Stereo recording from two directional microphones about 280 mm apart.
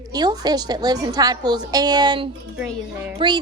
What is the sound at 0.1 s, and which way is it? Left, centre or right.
Speech, centre.